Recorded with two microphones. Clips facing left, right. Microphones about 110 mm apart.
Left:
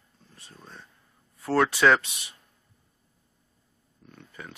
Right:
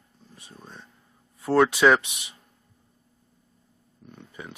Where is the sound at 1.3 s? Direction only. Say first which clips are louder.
Right 3 dB; 15° right (ahead or behind).